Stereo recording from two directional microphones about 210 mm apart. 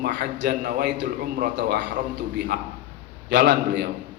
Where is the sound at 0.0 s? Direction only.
55° right (ahead or behind).